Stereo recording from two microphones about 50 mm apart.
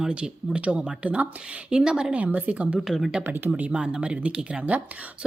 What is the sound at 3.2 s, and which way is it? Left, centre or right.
Speech, right.